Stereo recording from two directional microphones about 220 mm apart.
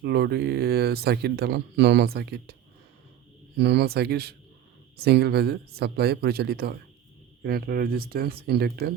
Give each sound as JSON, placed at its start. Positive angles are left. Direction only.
{"t": 0.0, "sound": "speech", "side_deg": -45}
{"t": 3.6, "sound": "speech", "side_deg": -50}